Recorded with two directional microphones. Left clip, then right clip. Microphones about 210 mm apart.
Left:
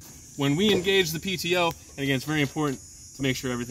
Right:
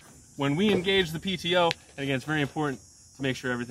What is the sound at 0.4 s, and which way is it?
Speech, 15° left (ahead or behind).